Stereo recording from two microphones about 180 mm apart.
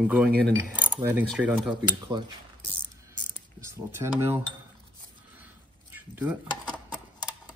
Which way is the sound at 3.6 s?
15° right (ahead or behind).